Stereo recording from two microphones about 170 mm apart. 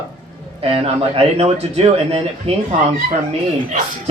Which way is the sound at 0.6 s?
35° right (ahead or behind).